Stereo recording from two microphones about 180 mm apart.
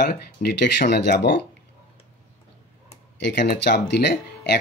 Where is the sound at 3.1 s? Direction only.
75° left (ahead or behind).